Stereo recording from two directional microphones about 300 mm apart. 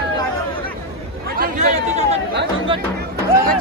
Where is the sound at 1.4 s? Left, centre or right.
Right.